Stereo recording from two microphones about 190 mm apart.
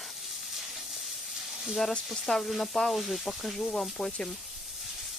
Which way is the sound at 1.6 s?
Centre (ahead or behind).